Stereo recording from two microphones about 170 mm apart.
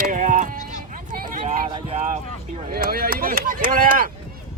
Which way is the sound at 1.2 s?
55° right (ahead or behind).